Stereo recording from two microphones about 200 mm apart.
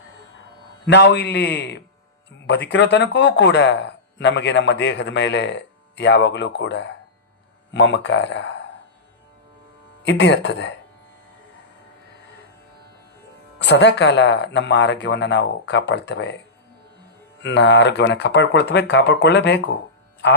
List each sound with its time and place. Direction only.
0.9 s speech: 60° left (ahead or behind)
10.0 s speech: 60° left (ahead or behind)
13.6 s speech: 60° left (ahead or behind)
17.4 s speech: 60° left (ahead or behind)